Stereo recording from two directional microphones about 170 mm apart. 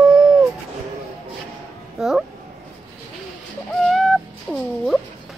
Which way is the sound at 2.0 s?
5° right (ahead or behind).